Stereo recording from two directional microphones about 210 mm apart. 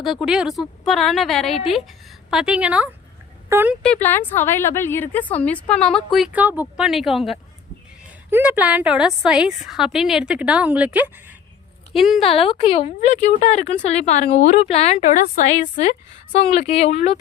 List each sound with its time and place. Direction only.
0.0 s a woman's voice: centre (ahead or behind)
4.0 s a woman's voice: 10° left (ahead or behind)
12.2 s a woman's voice: 25° left (ahead or behind)